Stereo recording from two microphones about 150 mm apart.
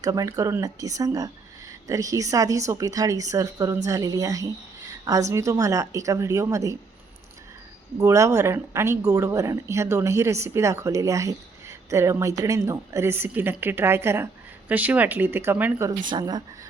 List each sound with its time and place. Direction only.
0.0 s a woman's voice: 25° right (ahead or behind)
7.9 s a woman's voice: 20° right (ahead or behind)
16.0 s a woman's voice: 30° right (ahead or behind)